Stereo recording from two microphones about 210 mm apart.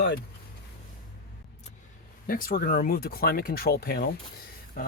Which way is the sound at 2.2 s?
40° left (ahead or behind).